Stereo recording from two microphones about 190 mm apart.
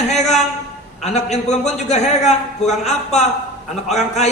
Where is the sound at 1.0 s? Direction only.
35° left (ahead or behind).